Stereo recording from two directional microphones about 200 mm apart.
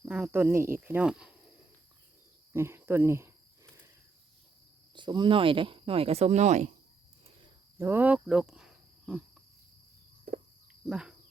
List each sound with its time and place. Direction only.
0.0 s speech: 5° right (ahead or behind)
2.5 s cricket: 10° right (ahead or behind)
4.9 s speech: 25° right (ahead or behind)
7.8 s speech: 10° right (ahead or behind)
10.3 s a sound: 50° right (ahead or behind)
10.8 s speech: 5° right (ahead or behind)